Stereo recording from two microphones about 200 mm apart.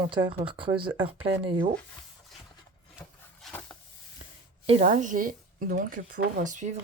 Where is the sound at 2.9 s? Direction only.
Centre (ahead or behind).